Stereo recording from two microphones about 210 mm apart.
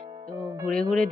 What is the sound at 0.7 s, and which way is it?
Speech, 5° left (ahead or behind).